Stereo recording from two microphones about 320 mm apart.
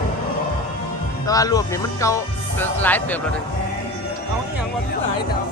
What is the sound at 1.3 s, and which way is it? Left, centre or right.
A man's voice, centre.